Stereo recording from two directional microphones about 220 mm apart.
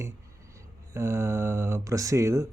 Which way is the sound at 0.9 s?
10° right (ahead or behind).